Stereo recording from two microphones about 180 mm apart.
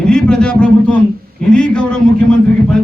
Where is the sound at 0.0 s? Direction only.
5° left (ahead or behind).